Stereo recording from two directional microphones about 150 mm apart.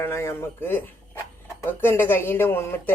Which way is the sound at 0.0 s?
15° left (ahead or behind).